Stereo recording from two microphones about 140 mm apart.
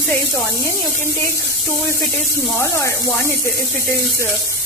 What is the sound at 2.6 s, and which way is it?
Speech, 20° left (ahead or behind).